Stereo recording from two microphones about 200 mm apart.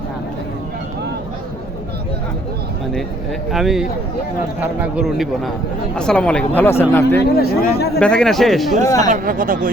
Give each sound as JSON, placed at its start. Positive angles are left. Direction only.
{"t": 3.5, "sound": "a man's voice", "side_deg": 0}
{"t": 7.2, "sound": "speech", "side_deg": 50}
{"t": 7.9, "sound": "a man's voice", "side_deg": 5}
{"t": 8.8, "sound": "speech", "side_deg": 15}
{"t": 9.0, "sound": "speech", "side_deg": -40}